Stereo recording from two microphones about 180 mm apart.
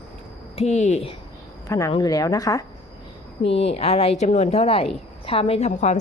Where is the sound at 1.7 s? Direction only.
15° left (ahead or behind).